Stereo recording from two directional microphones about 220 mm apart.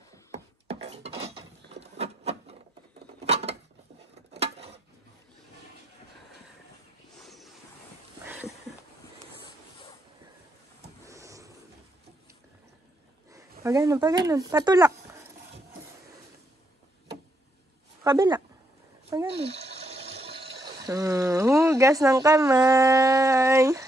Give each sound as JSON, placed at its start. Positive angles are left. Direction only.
{"t": 0.7, "sound": "filing", "side_deg": -30}
{"t": 3.3, "sound": "dishes", "side_deg": -30}
{"t": 4.3, "sound": "a sound", "side_deg": -25}
{"t": 7.2, "sound": "ocean", "side_deg": 0}
{"t": 8.3, "sound": "a sound", "side_deg": -5}
{"t": 11.1, "sound": "a sound", "side_deg": -15}
{"t": 13.3, "sound": "speech", "side_deg": -15}
{"t": 18.0, "sound": "speech", "side_deg": -20}
{"t": 19.3, "sound": "water", "side_deg": -30}
{"t": 20.8, "sound": "speech", "side_deg": -15}